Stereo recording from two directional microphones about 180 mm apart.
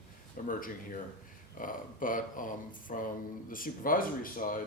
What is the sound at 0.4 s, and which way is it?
A man's voice, 50° left (ahead or behind).